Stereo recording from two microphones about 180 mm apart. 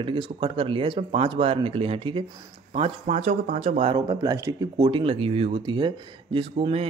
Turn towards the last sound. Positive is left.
turn(degrees=-30)  # may be behind; listen again after turning